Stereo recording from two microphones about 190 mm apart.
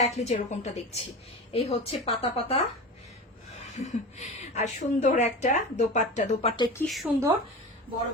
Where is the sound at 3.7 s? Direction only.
40° left (ahead or behind).